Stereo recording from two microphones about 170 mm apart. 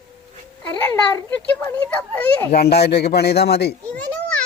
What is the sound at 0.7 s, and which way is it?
A child's voice, 10° left (ahead or behind).